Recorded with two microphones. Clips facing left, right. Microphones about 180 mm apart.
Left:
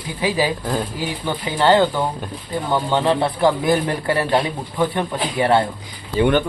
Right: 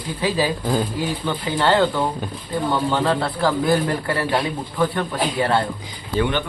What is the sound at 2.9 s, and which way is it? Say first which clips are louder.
A man's voice: left 2 dB; 20° left (ahead or behind).